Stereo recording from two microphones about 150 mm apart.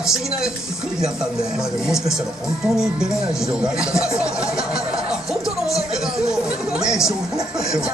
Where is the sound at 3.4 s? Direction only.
5° right (ahead or behind).